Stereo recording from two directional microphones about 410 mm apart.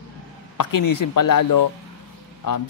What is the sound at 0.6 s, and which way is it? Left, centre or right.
Speech, left.